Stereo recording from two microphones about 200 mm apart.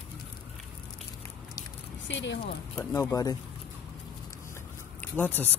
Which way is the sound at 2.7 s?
15° left (ahead or behind).